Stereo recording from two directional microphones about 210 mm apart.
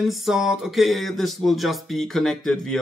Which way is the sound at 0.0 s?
Centre (ahead or behind).